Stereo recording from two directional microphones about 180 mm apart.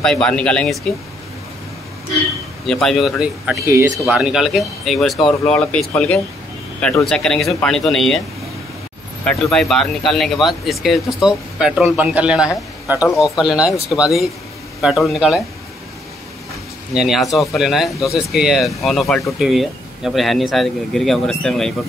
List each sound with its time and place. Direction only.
0.0 s speech: 5° left (ahead or behind)
2.6 s speech: centre (ahead or behind)
3.6 s speech: 15° right (ahead or behind)
4.0 s speech: 5° right (ahead or behind)
9.2 s speech: 5° left (ahead or behind)
16.9 s speech: centre (ahead or behind)